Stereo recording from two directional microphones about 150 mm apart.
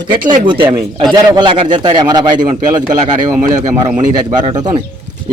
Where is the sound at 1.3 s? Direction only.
30° right (ahead or behind).